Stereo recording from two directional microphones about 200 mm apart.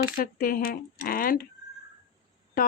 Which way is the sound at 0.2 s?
45° left (ahead or behind).